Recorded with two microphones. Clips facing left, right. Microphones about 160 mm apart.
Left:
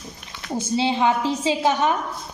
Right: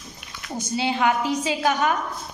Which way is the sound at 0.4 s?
25° left (ahead or behind).